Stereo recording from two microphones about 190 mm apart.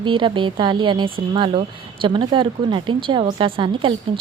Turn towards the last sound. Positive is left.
turn(degrees=-25)  # may be behind; listen again after turning